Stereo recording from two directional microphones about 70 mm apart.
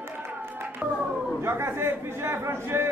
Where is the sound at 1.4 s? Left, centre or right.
Right.